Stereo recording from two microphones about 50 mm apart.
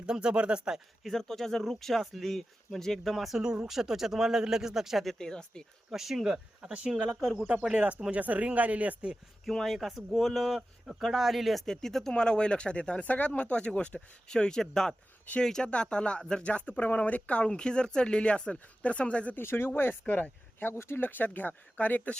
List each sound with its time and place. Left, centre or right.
0.0 s speech: centre
1.0 s speech: centre
3.3 s speech: centre
5.1 s speech: centre
5.9 s speech: centre
8.1 s speech: right
9.4 s speech: centre
11.6 s speech: centre; by 19.4 s left
19.4 s speech: left
20.1 s speech: left
20.6 s speech: left